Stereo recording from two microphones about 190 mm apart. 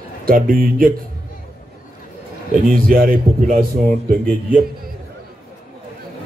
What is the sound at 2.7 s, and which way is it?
A man's voice, 50° right (ahead or behind).